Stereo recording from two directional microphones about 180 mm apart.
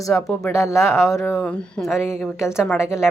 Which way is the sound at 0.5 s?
15° left (ahead or behind).